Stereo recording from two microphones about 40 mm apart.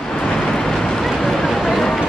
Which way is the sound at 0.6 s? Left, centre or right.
Centre.